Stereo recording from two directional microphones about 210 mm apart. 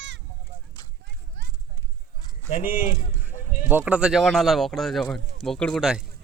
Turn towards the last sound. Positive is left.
turn(degrees=0)  # may be behind; listen again after turning